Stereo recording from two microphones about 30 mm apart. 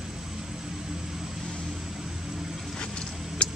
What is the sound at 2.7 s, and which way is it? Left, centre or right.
Vehicle, left.